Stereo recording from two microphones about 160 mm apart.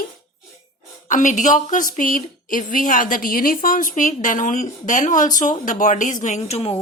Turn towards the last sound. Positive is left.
turn(degrees=40)  # may be behind; listen again after turning